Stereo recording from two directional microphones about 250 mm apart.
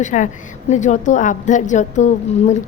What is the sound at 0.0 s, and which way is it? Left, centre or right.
A woman's voice, left.